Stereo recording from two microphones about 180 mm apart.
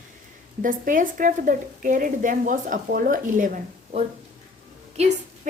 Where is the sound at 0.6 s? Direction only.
45° right (ahead or behind).